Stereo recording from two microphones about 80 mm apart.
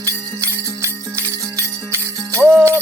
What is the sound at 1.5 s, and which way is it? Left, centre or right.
Music, right.